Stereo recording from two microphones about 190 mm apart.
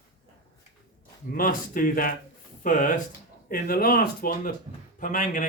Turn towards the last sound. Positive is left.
turn(degrees=45)  # may be behind; listen again after turning